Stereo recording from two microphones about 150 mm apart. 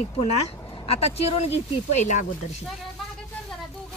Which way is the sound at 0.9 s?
40° left (ahead or behind).